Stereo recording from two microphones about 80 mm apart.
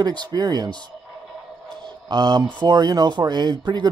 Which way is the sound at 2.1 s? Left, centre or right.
Right.